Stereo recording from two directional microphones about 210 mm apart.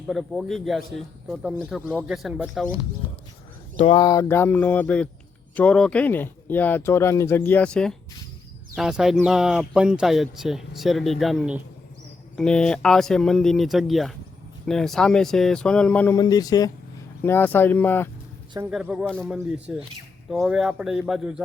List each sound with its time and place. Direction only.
0.1 s speech: centre (ahead or behind)
3.8 s speech: 25° left (ahead or behind); by 18.1 s 10° left (ahead or behind)
18.7 s speech: 5° right (ahead or behind)